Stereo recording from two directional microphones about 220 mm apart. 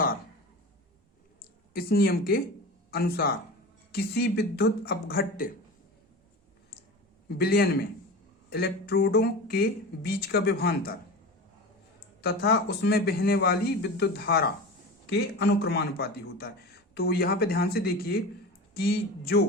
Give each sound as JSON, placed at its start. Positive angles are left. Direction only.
{"t": 1.7, "sound": "a man's voice", "side_deg": 45}
{"t": 7.3, "sound": "a man's voice", "side_deg": 45}
{"t": 12.2, "sound": "a man's voice", "side_deg": 45}